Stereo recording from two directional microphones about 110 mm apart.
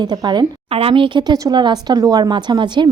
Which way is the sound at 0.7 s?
55° right (ahead or behind).